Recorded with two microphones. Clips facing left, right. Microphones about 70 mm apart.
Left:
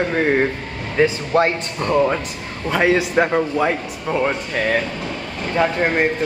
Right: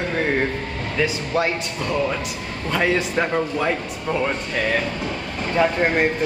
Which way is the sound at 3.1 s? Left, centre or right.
Centre.